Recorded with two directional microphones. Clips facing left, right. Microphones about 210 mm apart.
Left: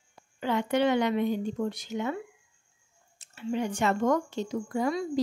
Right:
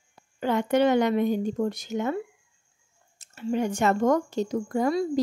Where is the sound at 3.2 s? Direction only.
45° right (ahead or behind).